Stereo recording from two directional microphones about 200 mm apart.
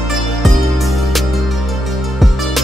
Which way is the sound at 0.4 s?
Centre (ahead or behind).